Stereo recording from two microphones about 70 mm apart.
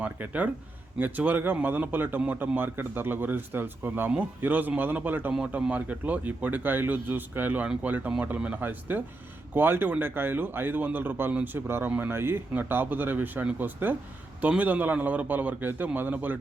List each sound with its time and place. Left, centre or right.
0.0 s speech: right
11.3 s speech: centre
11.5 s speech: right